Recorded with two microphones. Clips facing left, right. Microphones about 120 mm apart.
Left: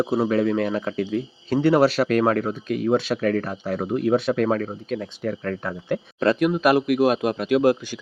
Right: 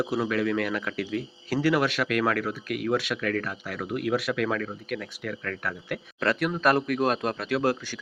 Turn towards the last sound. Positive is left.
turn(degrees=15)  # may be behind; listen again after turning